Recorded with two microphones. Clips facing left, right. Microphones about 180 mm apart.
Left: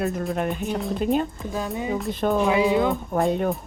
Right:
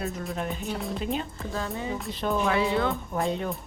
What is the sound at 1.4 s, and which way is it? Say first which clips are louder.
Speech: left 4 dB; 15° left (ahead or behind).